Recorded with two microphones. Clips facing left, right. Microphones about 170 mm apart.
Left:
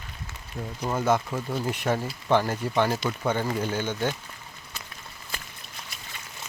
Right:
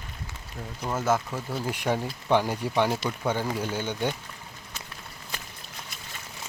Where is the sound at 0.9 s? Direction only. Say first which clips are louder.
Left 2 dB; centre (ahead or behind).